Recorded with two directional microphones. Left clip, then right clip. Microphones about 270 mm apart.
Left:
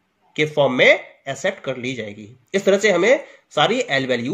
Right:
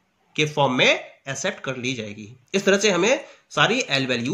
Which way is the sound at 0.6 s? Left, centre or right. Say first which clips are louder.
Left 5 dB; centre.